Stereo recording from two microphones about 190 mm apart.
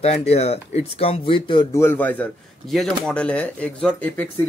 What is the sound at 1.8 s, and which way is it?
Speech, 10° left (ahead or behind).